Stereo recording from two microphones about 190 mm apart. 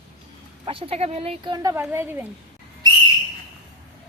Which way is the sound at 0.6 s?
30° right (ahead or behind).